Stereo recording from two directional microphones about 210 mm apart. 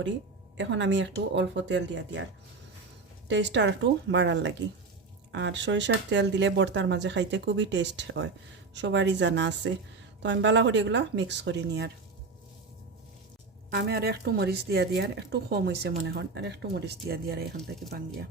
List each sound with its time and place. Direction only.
0.5 s speech: 60° right (ahead or behind)
3.2 s speech: 60° right (ahead or behind)
13.7 s speech: 50° right (ahead or behind)